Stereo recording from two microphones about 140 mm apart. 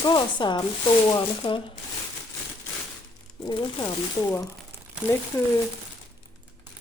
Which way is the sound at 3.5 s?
30° left (ahead or behind).